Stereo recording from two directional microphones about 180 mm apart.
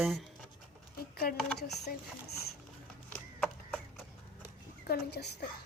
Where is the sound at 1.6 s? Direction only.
65° left (ahead or behind).